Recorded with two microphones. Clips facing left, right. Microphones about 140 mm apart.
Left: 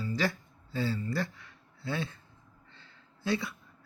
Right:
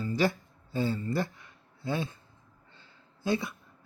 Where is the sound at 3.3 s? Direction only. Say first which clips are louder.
Right 2 dB; 20° right (ahead or behind).